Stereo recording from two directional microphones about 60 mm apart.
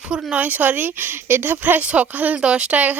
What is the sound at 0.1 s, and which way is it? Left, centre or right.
A woman's voice, centre.